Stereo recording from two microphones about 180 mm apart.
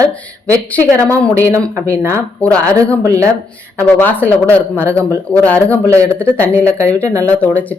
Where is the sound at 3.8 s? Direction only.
10° left (ahead or behind).